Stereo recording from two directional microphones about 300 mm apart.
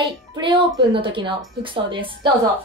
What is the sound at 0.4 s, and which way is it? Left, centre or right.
A woman's voice, centre.